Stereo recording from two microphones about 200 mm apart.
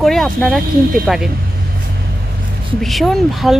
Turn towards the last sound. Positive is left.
turn(degrees=0)  # may be behind; listen again after turning